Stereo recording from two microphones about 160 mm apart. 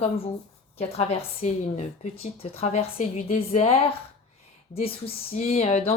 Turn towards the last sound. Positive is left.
turn(degrees=40)  # may be behind; listen again after turning